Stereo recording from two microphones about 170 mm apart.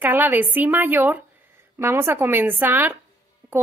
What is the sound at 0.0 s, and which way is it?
A woman's voice, 10° right (ahead or behind).